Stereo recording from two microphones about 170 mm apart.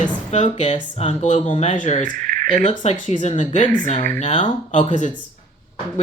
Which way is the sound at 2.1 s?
60° right (ahead or behind).